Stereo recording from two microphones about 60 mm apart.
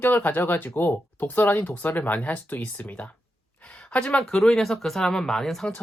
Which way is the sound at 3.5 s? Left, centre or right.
Centre.